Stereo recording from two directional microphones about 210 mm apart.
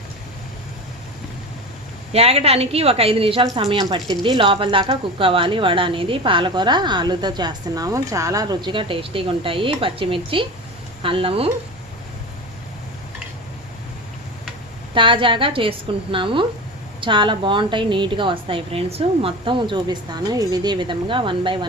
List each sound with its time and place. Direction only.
2.1 s a woman's voice: 30° right (ahead or behind)
14.9 s a woman's voice: 25° right (ahead or behind)